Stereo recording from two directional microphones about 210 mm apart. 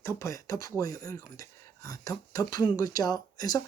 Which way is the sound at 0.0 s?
15° left (ahead or behind).